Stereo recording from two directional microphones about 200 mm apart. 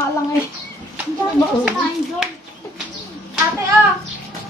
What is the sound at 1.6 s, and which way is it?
Speech, 5° right (ahead or behind).